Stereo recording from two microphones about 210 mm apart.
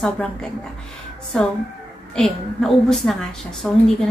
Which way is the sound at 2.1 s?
Centre (ahead or behind).